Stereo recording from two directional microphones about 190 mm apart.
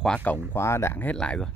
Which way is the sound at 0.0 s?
5° left (ahead or behind).